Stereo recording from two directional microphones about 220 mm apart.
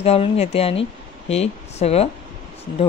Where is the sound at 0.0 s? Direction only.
30° left (ahead or behind).